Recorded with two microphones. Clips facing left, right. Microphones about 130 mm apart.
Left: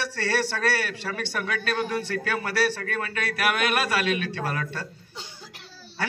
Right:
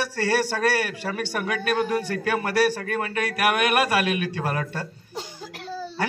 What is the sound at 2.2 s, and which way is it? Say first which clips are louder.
A man's voice: right 5 dB; 15° right (ahead or behind).